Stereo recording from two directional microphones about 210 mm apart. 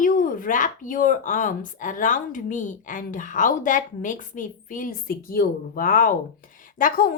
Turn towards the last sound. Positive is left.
turn(degrees=45)  # may be behind; listen again after turning